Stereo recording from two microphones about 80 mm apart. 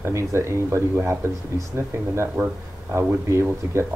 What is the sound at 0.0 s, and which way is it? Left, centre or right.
Speech, right.